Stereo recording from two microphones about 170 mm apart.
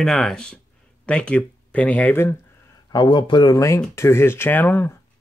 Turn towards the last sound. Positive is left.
turn(degrees=10)  # may be behind; listen again after turning